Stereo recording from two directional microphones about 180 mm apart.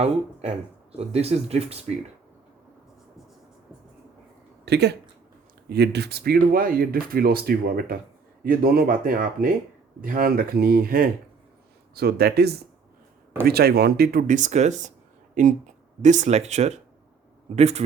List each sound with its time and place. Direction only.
0.9 s speech: 35° right (ahead or behind)
4.6 s speech: 65° right (ahead or behind); by 17.8 s 35° right (ahead or behind)